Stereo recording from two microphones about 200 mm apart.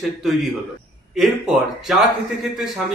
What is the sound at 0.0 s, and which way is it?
A man's voice, centre (ahead or behind).